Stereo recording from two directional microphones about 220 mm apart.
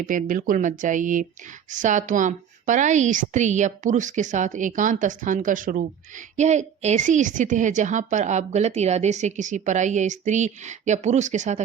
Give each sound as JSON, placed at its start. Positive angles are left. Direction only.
{"t": 0.0, "sound": "speech", "side_deg": -40}